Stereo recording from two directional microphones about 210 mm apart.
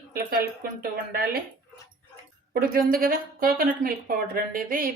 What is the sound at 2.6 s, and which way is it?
Speech, 45° right (ahead or behind).